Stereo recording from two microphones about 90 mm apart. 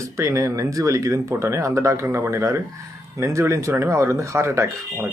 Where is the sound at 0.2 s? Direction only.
35° right (ahead or behind).